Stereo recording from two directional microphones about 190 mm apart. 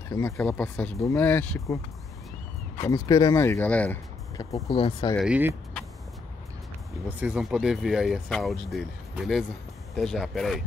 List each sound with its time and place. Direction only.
0.1 s speech: 5° left (ahead or behind)
2.8 s speech: 20° left (ahead or behind)
4.6 s speech: 30° left (ahead or behind)
5.1 s speech: 5° right (ahead or behind)
7.2 s speech: 5° right (ahead or behind)